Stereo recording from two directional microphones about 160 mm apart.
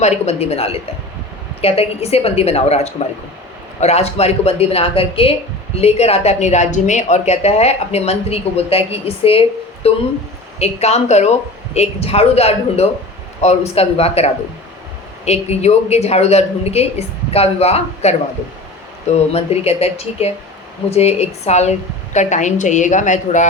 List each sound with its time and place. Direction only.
0.0 s a woman's voice: 40° left (ahead or behind)